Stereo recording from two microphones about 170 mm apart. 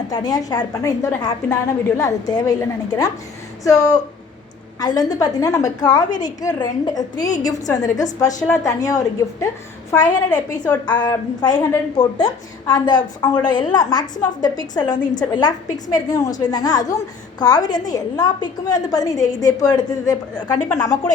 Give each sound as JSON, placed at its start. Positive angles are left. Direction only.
{"t": 0.1, "sound": "a woman's voice", "side_deg": 20}
{"t": 9.9, "sound": "a woman's voice", "side_deg": 10}
{"t": 10.8, "sound": "a woman's voice", "side_deg": 25}